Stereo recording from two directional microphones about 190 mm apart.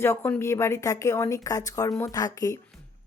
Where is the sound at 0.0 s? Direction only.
10° left (ahead or behind).